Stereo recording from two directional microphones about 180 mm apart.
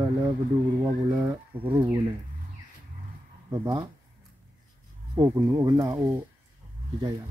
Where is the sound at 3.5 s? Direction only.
20° right (ahead or behind).